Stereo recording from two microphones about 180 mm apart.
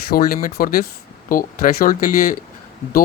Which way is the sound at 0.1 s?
55° left (ahead or behind).